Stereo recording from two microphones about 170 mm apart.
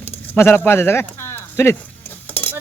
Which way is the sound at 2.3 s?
10° left (ahead or behind).